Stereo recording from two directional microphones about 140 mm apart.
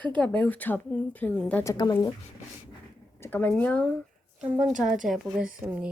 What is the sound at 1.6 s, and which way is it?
Speech, 30° left (ahead or behind).